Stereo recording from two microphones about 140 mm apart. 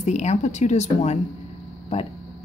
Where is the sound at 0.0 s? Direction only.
55° left (ahead or behind).